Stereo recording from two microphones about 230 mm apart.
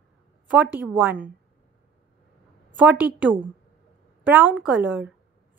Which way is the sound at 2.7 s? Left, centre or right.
Centre.